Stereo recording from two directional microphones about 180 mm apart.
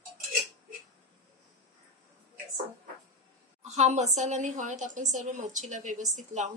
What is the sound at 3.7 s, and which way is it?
A woman's voice, 40° right (ahead or behind).